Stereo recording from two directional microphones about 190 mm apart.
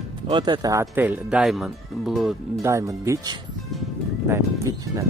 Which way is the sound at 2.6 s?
15° right (ahead or behind).